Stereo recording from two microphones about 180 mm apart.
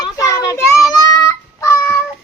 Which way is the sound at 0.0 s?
20° left (ahead or behind).